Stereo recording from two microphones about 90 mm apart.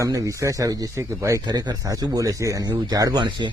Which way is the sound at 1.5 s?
50° right (ahead or behind).